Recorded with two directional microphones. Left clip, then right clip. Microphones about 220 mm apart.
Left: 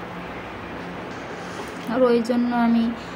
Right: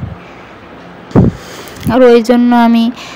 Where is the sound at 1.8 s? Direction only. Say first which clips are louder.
Right 13 dB; 40° right (ahead or behind).